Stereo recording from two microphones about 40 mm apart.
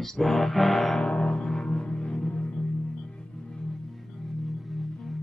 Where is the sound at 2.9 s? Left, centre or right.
Centre.